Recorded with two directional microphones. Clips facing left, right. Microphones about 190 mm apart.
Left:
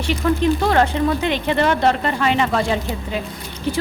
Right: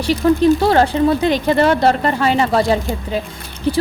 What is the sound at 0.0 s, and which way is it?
A woman's voice, 35° right (ahead or behind).